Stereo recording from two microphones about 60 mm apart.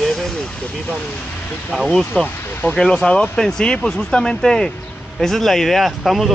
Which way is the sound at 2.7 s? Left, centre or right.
Centre.